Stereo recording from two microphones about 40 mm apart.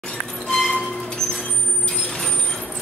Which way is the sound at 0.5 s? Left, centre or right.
Centre.